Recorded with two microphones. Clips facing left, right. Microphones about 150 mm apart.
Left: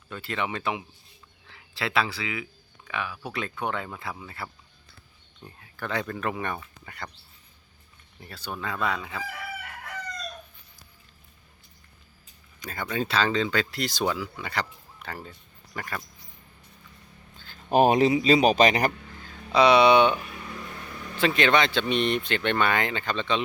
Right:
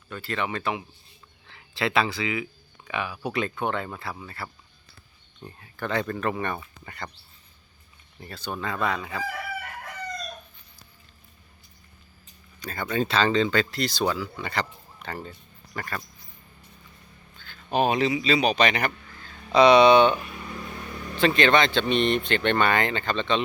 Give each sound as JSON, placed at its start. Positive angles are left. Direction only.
{"t": 0.1, "sound": "speech", "side_deg": 20}
{"t": 1.5, "sound": "speech", "side_deg": 5}
{"t": 8.2, "sound": "speech", "side_deg": 5}
{"t": 12.6, "sound": "speech", "side_deg": 10}
{"t": 17.3, "sound": "a sound", "side_deg": 35}
{"t": 18.2, "sound": "speech", "side_deg": 45}
{"t": 19.5, "sound": "speech", "side_deg": 5}
{"t": 21.2, "sound": "speech", "side_deg": 5}